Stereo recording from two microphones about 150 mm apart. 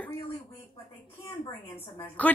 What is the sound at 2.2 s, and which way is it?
Speech, 10° left (ahead or behind).